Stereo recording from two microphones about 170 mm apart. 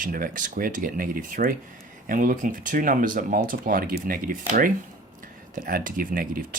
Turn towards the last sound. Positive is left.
turn(degrees=-55)  # may be behind; listen again after turning